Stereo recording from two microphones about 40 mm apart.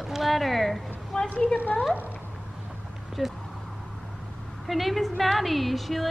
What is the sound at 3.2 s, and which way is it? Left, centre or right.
Speech, centre.